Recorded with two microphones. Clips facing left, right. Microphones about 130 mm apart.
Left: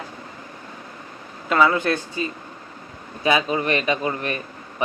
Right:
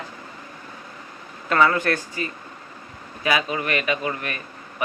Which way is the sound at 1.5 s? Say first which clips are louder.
Left 1 dB; 15° left (ahead or behind).